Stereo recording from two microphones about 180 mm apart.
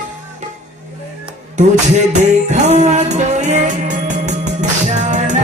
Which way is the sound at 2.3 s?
40° right (ahead or behind).